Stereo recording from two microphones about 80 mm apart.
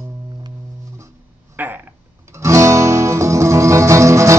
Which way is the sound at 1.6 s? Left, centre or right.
Right.